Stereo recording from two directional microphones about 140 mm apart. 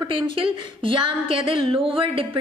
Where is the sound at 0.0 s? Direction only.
35° right (ahead or behind).